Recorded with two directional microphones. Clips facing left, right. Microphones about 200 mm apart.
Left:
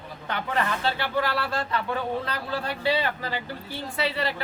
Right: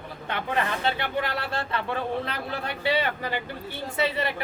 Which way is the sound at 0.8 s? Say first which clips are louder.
Left 1 dB; 20° right (ahead or behind).